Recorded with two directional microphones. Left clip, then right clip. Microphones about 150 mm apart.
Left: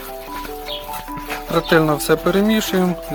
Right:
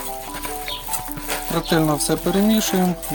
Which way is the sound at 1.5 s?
Centre (ahead or behind).